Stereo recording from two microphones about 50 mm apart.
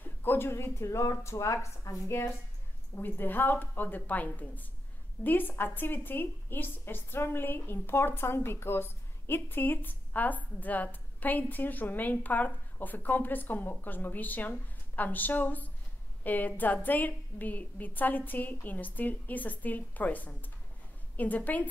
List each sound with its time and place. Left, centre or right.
0.0 s a sound: left
0.5 s a woman's voice: left
3.0 s a woman's voice: left